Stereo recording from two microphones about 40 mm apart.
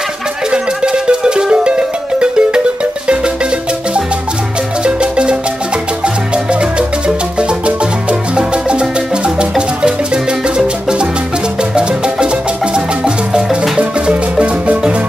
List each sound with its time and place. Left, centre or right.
0.5 s music: right
4.8 s music: right
12.7 s music: right